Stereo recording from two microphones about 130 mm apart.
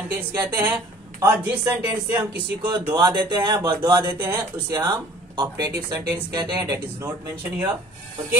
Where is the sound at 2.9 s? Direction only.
35° right (ahead or behind).